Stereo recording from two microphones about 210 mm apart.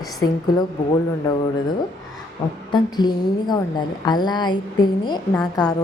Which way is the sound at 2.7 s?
20° left (ahead or behind).